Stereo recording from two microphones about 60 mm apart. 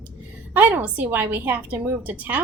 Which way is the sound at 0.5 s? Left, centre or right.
Right.